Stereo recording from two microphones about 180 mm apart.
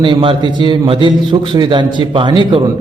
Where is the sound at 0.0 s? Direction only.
30° right (ahead or behind).